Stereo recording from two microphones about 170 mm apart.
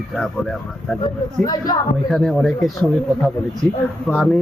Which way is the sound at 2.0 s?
Centre (ahead or behind).